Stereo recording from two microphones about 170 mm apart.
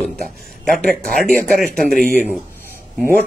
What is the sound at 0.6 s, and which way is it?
Speech, centre (ahead or behind).